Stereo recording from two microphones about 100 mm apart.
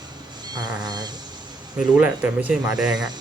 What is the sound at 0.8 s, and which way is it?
Speech, 45° right (ahead or behind).